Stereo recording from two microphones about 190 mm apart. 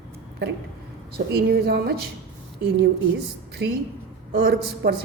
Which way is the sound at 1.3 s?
55° right (ahead or behind).